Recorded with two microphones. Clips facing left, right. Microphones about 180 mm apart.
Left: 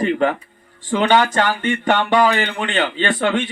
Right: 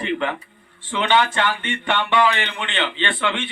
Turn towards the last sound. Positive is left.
turn(degrees=40)  # may be behind; listen again after turning